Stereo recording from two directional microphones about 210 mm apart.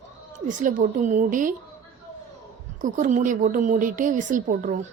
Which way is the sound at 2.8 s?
35° right (ahead or behind).